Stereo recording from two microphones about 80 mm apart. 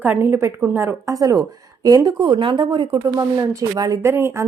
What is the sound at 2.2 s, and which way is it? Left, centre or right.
Speech, right.